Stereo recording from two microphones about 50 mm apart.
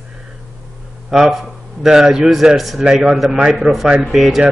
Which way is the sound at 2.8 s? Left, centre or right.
Centre.